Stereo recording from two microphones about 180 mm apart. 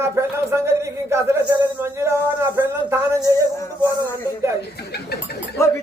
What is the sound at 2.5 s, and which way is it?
Speech, 15° right (ahead or behind).